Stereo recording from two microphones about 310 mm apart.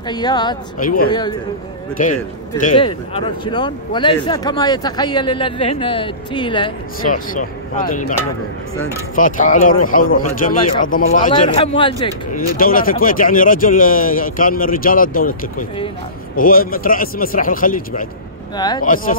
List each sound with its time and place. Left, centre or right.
0.1 s speech: centre
0.7 s speech: left
7.3 s speech: left
9.1 s speech: left
12.3 s speech: left